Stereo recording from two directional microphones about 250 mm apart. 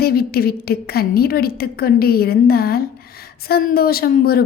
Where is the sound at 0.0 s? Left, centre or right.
Left.